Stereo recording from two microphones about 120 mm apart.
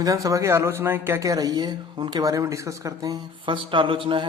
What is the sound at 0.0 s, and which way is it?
A man's voice, 30° right (ahead or behind).